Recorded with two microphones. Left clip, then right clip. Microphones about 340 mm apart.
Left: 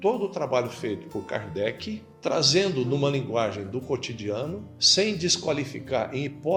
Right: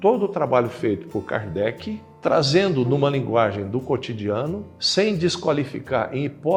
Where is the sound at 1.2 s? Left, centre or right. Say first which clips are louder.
Right 4 dB; right.